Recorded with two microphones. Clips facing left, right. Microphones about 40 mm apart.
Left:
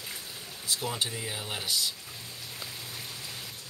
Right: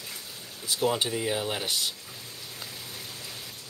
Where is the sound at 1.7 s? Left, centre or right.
Right.